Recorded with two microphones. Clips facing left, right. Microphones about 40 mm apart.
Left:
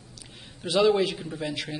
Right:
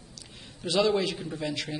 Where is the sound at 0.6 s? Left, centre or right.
Centre.